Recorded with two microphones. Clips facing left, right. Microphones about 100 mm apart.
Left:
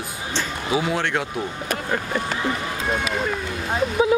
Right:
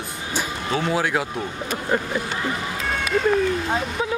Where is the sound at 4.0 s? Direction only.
15° left (ahead or behind).